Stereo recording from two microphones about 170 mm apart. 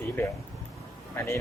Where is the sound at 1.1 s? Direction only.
15° left (ahead or behind).